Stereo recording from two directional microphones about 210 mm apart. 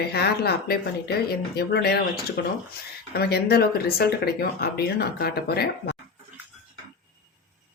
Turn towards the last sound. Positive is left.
turn(degrees=50)  # may be behind; listen again after turning